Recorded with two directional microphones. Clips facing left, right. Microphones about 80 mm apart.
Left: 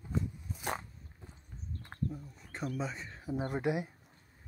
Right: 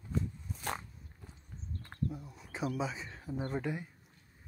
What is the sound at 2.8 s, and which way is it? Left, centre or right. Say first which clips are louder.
Speech: right 1 dB; centre.